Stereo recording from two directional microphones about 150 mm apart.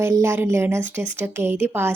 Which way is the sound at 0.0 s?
15° right (ahead or behind).